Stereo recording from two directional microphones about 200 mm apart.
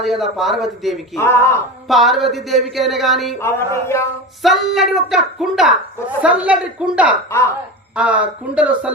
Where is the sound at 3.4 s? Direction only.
15° left (ahead or behind).